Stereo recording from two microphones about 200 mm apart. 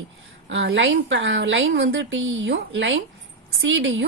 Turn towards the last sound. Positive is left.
turn(degrees=-70)  # may be behind; listen again after turning